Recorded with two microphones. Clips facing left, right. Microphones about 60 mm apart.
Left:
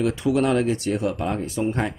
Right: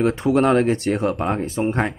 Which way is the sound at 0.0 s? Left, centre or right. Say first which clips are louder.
Right 4 dB; right.